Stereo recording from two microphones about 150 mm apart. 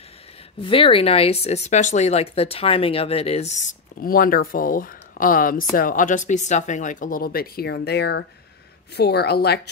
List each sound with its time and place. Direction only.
0.6 s a woman's voice: 35° left (ahead or behind); by 9.6 s 90° left